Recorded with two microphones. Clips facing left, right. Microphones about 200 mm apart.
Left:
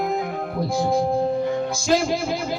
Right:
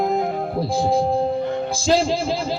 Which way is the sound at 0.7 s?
30° right (ahead or behind).